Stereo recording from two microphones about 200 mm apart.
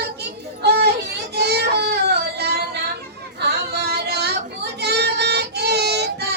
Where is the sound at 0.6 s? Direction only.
55° right (ahead or behind).